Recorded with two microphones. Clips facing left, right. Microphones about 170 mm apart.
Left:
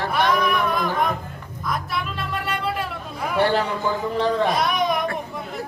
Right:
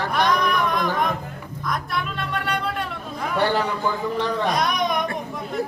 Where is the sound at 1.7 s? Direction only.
Centre (ahead or behind).